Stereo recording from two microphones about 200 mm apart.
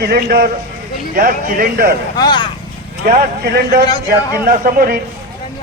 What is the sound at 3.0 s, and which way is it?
A man's voice, 50° right (ahead or behind).